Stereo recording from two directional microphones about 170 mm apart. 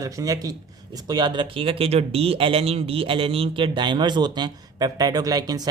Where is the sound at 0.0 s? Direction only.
20° right (ahead or behind).